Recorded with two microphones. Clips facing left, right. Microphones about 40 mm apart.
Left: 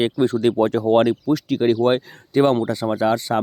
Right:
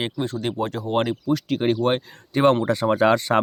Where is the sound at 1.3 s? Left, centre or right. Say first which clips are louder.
Left 3 dB; right.